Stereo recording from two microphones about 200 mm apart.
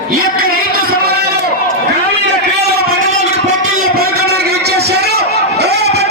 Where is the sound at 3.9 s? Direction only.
55° right (ahead or behind).